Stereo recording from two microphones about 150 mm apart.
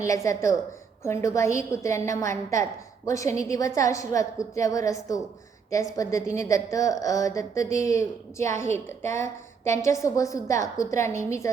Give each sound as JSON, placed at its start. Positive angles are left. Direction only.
{"t": 0.0, "sound": "speech", "side_deg": 20}